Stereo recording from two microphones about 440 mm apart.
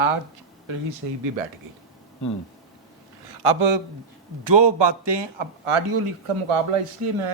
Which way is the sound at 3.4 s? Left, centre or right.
Right.